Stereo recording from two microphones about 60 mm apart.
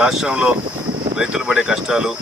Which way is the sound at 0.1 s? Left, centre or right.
Centre.